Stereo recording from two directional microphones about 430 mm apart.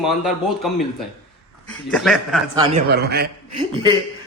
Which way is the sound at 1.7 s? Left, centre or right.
Centre.